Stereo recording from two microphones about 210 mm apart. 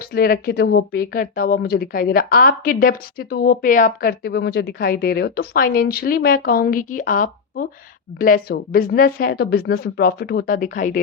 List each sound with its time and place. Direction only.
0.1 s speech: 45° left (ahead or behind)